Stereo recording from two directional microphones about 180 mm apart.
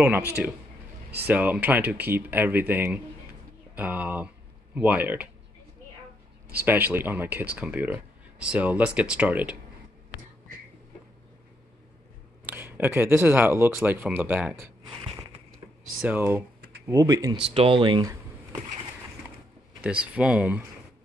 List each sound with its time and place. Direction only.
1.1 s speech: 10° right (ahead or behind)
6.5 s speech: 10° right (ahead or behind)
12.4 s speech: 10° right (ahead or behind)
14.9 s a sound: 30° right (ahead or behind)
16.0 s speech: 10° right (ahead or behind)
17.5 s speech: 30° right (ahead or behind)
19.8 s speech: 10° right (ahead or behind)